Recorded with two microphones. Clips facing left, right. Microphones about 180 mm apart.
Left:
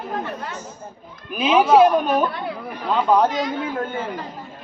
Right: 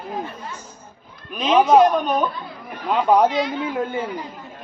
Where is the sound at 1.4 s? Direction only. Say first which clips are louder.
Even; 5° left (ahead or behind).